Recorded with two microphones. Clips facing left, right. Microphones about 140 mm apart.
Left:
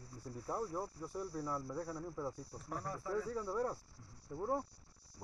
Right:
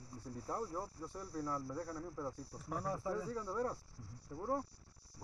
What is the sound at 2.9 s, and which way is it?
Speech, 15° right (ahead or behind).